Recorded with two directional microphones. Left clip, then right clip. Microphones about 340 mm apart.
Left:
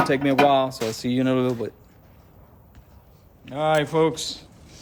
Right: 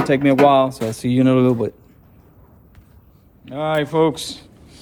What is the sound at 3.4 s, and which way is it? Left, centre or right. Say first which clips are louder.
A man's voice: right 1 dB; centre.